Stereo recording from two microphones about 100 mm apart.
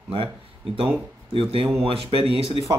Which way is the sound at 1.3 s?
65° right (ahead or behind).